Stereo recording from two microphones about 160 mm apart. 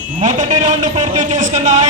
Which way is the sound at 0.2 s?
50° right (ahead or behind).